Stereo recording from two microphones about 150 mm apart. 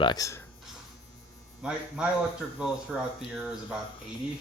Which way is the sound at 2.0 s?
5° right (ahead or behind).